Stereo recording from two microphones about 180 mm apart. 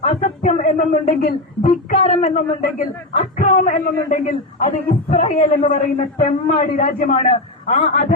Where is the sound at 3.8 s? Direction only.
55° left (ahead or behind).